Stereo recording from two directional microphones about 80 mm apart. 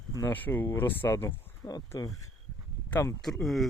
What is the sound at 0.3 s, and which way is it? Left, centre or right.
Speech, left.